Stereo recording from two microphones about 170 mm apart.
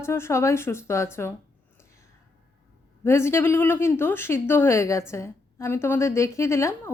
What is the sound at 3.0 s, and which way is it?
A woman's voice, 15° left (ahead or behind).